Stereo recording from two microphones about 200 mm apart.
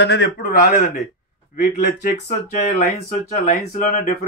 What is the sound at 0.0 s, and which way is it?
A man's voice, 55° left (ahead or behind).